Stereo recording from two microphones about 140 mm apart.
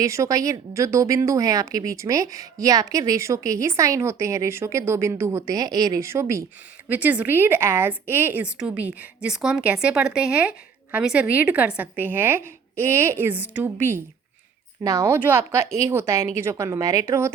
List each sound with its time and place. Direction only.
0.0 s a woman's voice: 20° right (ahead or behind)